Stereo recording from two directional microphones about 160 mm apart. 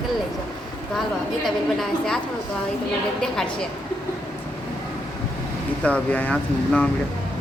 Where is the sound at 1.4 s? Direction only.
Centre (ahead or behind).